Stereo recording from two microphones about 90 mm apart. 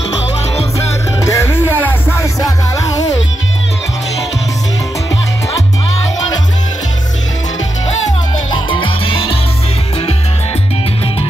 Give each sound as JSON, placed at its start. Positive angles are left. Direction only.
{"t": 0.7, "sound": "music", "side_deg": 35}
{"t": 8.6, "sound": "music", "side_deg": 75}